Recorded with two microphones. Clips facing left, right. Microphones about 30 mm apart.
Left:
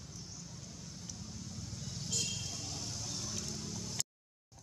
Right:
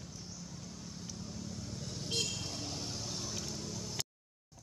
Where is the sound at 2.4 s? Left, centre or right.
Right; by 3.9 s centre.